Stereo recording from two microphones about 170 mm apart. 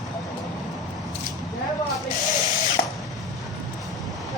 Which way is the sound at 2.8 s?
65° left (ahead or behind).